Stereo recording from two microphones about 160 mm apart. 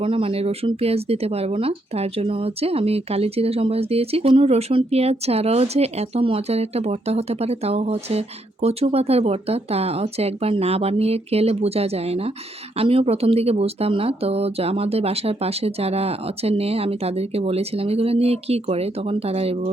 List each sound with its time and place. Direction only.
0.0 s speech: 35° right (ahead or behind)